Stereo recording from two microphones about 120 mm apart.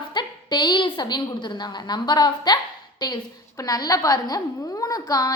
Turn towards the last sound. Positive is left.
turn(degrees=30)  # may be behind; listen again after turning